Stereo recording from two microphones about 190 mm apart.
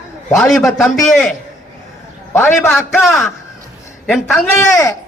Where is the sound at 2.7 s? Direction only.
Centre (ahead or behind).